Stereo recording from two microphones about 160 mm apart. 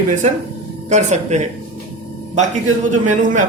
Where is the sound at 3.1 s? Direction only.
55° right (ahead or behind).